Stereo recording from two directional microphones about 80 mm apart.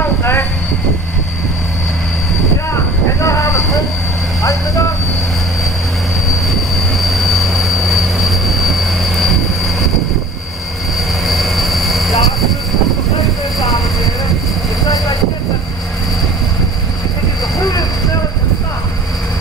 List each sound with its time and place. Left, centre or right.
0.0 s train: left
2.7 s vehicle: left
4.4 s speech: left
6.3 s train: centre
11.2 s vehicle: centre